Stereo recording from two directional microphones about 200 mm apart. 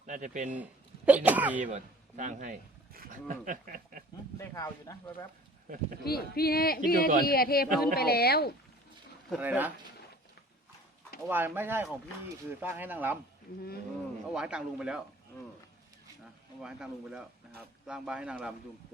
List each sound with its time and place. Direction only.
0.0 s a man's voice: 40° right (ahead or behind)
0.5 s speech: 5° right (ahead or behind)
1.6 s speech: 40° right (ahead or behind)
4.4 s speech: 15° left (ahead or behind)
5.6 s speech: 45° right (ahead or behind)
6.1 s speech: 50° left (ahead or behind)
9.4 s speech: 10° right (ahead or behind)
11.3 s speech: 10° right (ahead or behind)
14.3 s speech: 5° right (ahead or behind)
16.6 s speech: 5° right (ahead or behind)